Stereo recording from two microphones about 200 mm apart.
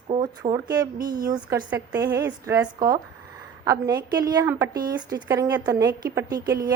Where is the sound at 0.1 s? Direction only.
20° right (ahead or behind).